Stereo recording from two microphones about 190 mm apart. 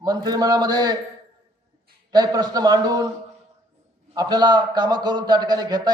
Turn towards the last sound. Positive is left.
turn(degrees=-20)  # may be behind; listen again after turning